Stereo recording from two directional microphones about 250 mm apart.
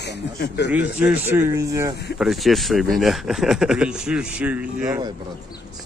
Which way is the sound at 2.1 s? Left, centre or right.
Centre.